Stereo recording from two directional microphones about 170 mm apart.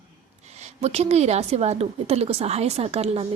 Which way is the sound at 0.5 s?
40° right (ahead or behind).